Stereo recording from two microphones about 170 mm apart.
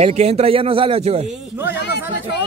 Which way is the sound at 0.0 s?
40° right (ahead or behind).